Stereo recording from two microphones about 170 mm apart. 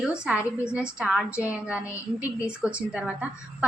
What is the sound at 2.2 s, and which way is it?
A woman's voice, 5° right (ahead or behind).